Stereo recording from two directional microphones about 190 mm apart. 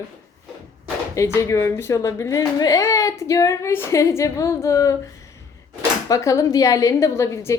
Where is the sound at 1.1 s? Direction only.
15° left (ahead or behind).